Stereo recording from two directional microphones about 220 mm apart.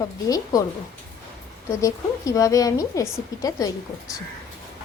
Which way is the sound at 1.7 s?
15° left (ahead or behind).